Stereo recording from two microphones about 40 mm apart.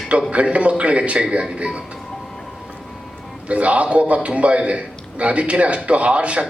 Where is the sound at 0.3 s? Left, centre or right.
Right.